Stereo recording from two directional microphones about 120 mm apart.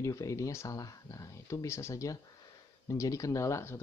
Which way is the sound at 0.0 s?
25° left (ahead or behind).